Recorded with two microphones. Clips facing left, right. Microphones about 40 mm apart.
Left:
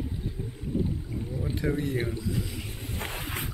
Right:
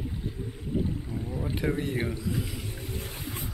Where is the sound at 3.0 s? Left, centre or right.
Left.